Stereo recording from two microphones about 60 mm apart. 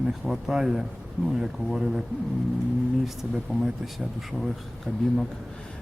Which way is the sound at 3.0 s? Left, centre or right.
Centre.